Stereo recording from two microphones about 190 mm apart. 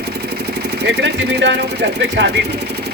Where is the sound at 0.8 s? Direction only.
65° right (ahead or behind).